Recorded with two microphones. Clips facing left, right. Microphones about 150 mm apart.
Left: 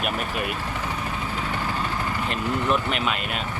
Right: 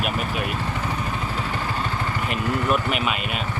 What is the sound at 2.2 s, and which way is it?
Speech, 5° right (ahead or behind).